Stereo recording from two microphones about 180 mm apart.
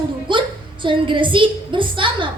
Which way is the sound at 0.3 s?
25° right (ahead or behind).